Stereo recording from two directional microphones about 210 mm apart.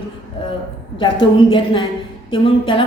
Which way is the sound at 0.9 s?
25° left (ahead or behind).